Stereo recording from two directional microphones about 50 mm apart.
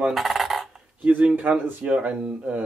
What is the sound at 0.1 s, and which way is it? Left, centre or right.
Coin, centre.